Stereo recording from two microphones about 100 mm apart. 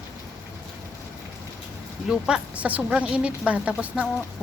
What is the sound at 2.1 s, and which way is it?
A woman's voice, 5° right (ahead or behind).